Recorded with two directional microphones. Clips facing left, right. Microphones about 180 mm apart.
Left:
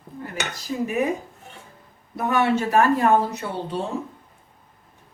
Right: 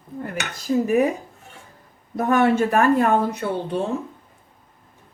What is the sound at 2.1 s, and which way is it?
Speech, 50° right (ahead or behind).